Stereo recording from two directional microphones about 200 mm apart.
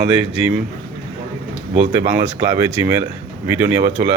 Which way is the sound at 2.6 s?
15° right (ahead or behind).